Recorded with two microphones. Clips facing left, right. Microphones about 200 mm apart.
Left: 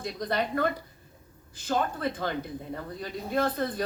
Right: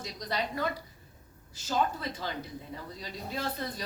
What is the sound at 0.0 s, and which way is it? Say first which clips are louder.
A woman's voice: left 5 dB; 55° left (ahead or behind).